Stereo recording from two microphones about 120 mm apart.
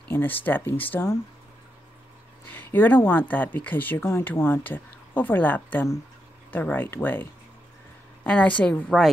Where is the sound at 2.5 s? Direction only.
15° left (ahead or behind).